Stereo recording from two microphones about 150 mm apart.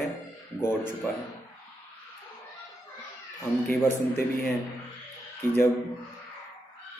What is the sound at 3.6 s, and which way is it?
Speech, 15° left (ahead or behind).